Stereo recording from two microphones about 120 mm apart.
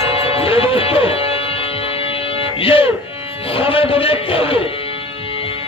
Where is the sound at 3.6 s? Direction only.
50° left (ahead or behind).